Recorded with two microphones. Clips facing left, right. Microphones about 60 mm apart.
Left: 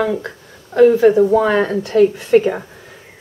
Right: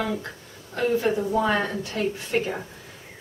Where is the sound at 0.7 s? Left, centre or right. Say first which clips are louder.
Left 13 dB; left.